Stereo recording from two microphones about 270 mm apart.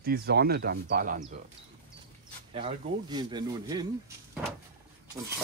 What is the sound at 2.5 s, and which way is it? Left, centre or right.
Speech, right.